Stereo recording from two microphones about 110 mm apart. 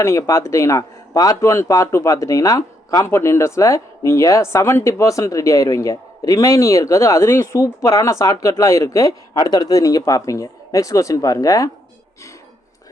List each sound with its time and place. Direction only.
0.0 s speech: 25° left (ahead or behind)